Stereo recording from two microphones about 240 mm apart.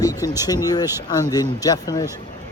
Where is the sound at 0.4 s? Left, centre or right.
Centre.